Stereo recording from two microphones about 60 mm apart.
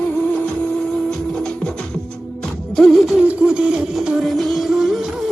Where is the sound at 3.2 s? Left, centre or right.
Centre.